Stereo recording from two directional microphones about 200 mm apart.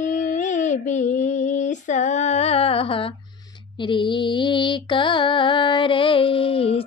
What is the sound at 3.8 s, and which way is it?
Mantra, 25° left (ahead or behind).